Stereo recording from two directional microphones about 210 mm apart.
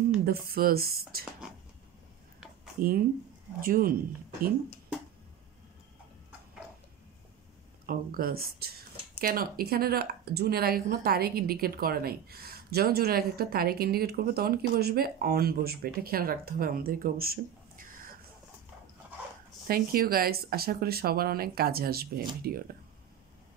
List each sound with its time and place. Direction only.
0.2 s speech: 45° right (ahead or behind)
2.8 s speech: 40° right (ahead or behind)
7.8 s speech: 40° right (ahead or behind)
19.7 s speech: 45° right (ahead or behind)